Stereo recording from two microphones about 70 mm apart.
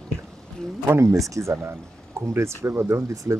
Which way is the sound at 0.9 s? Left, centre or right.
Right.